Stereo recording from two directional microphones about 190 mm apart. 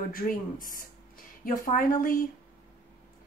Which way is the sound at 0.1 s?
45° left (ahead or behind).